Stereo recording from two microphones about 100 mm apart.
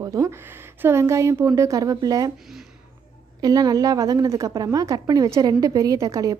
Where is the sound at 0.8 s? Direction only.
25° right (ahead or behind).